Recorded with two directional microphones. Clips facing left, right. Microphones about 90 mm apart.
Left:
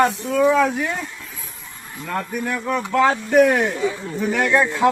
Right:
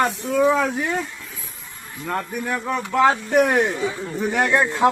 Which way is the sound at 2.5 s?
25° right (ahead or behind).